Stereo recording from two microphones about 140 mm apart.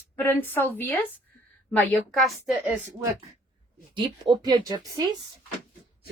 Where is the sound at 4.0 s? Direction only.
35° right (ahead or behind).